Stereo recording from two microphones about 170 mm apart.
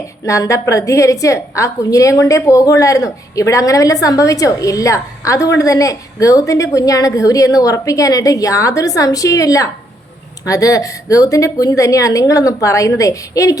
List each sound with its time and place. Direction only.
0.3 s a woman's voice: 20° left (ahead or behind)